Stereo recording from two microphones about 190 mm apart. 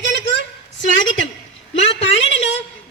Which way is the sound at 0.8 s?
80° left.